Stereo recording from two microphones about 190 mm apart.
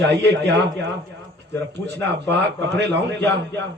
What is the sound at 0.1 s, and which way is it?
Speech, 65° right (ahead or behind).